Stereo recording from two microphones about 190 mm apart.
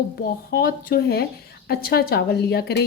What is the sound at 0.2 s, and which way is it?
A woman's voice, 50° left (ahead or behind).